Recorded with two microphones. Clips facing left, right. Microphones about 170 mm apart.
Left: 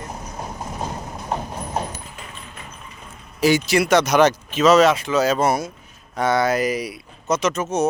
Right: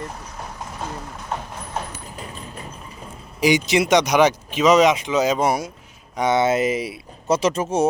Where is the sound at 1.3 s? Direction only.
35° left (ahead or behind).